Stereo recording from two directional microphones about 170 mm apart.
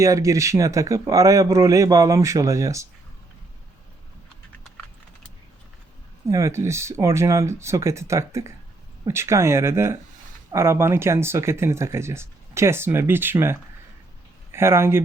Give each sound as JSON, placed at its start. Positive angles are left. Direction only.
{"t": 0.0, "sound": "speech", "side_deg": -20}
{"t": 6.2, "sound": "speech", "side_deg": -15}